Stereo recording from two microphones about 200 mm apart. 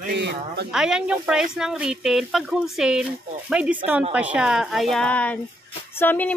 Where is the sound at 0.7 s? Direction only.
5° right (ahead or behind).